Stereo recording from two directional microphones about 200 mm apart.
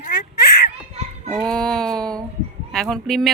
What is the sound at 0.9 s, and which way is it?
Children playing, 30° right (ahead or behind).